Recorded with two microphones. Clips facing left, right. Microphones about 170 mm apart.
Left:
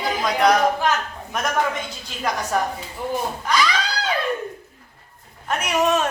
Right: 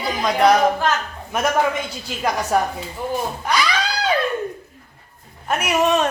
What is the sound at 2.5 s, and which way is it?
Speech, 10° right (ahead or behind).